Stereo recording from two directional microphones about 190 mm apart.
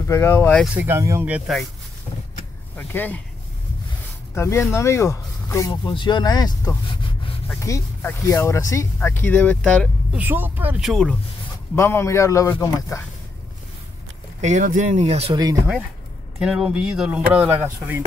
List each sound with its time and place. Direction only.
0.1 s speech: 15° left (ahead or behind)
0.7 s speech: 15° right (ahead or behind)
2.7 s speech: 10° left (ahead or behind)
4.4 s speech: 15° left (ahead or behind)
10.1 s speech: 10° right (ahead or behind)
11.7 s speech: 15° left (ahead or behind)
14.4 s speech: 40° right (ahead or behind)
16.3 s speech: 5° right (ahead or behind)